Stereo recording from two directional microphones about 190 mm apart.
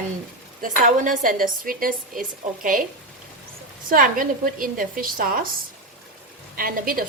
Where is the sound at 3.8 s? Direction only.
45° right (ahead or behind).